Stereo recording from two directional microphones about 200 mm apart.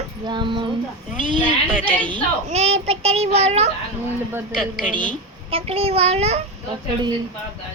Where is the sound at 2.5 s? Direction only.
35° right (ahead or behind).